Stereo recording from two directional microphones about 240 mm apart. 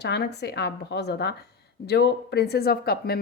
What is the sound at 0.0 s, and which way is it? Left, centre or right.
Speech, left.